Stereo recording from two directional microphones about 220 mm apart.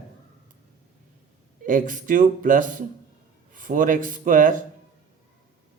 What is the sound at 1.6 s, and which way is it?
A man's voice, 35° right (ahead or behind).